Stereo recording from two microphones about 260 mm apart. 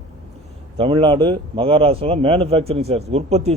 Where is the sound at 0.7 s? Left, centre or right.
Right.